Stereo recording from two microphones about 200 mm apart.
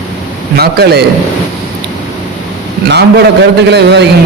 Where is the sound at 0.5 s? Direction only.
50° right (ahead or behind).